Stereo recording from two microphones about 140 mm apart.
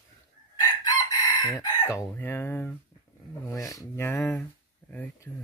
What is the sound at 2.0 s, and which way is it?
Speech, 15° left (ahead or behind).